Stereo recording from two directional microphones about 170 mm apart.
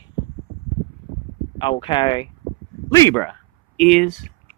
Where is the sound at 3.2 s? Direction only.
5° left (ahead or behind).